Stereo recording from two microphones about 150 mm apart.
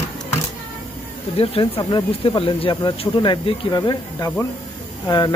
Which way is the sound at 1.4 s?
35° left (ahead or behind).